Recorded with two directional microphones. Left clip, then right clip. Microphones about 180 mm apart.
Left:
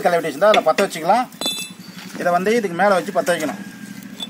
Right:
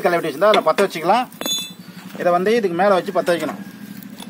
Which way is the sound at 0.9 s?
75° right (ahead or behind).